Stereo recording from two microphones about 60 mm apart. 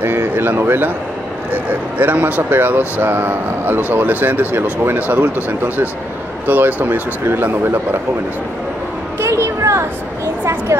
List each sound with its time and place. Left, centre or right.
0.0 s speech: right
1.5 s speech: right
9.2 s a sound: right